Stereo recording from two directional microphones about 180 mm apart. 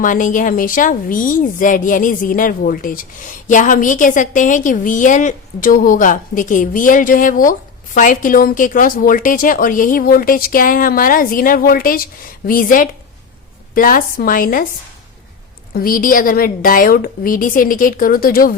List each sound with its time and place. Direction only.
0.0 s a woman's voice: 45° left (ahead or behind)
15.7 s a woman's voice: 55° left (ahead or behind)